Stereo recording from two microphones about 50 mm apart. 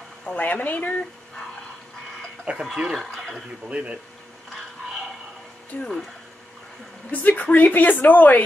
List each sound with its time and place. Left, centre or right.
0.3 s speech: left
2.5 s speech: centre
3.6 s speech: right
5.7 s speech: left
7.1 s speech: left